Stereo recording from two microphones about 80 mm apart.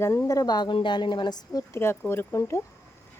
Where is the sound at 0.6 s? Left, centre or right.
Left.